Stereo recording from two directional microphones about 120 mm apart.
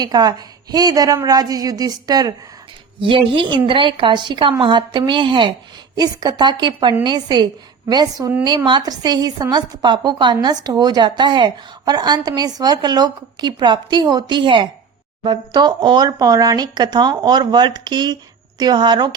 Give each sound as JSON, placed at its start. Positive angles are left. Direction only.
{"t": 0.0, "sound": "a woman's voice", "side_deg": -35}
{"t": 3.0, "sound": "a woman's voice", "side_deg": -45}